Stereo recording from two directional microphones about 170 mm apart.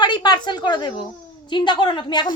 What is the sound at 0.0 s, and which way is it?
A woman's voice, 25° left (ahead or behind).